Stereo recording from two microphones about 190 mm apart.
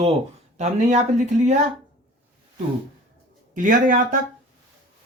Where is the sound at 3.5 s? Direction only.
45° right (ahead or behind).